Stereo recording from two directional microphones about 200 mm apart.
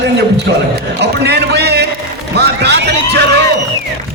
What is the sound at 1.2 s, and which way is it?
Music, 55° right (ahead or behind).